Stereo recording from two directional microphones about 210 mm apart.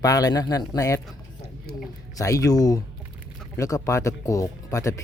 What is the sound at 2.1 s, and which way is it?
Speech, 15° left (ahead or behind).